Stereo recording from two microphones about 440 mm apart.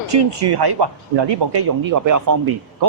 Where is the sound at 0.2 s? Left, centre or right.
Right.